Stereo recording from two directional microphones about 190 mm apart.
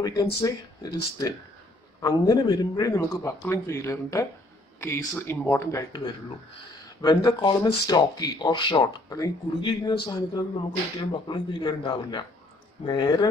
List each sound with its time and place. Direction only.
0.0 s a man's voice: 20° left (ahead or behind)